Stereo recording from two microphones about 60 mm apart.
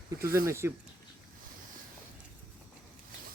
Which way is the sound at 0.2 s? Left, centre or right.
Right.